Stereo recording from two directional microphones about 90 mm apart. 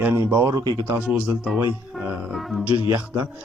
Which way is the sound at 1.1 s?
15° right (ahead or behind).